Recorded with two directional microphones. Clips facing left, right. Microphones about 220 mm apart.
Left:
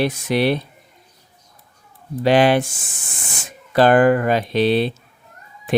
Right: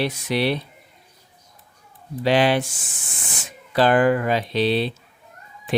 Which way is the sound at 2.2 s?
50° left (ahead or behind).